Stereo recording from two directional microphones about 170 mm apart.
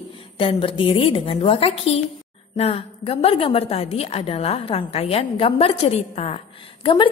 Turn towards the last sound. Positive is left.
turn(degrees=30)  # may be behind; listen again after turning